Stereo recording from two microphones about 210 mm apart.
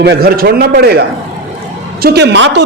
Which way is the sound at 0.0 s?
50° right (ahead or behind).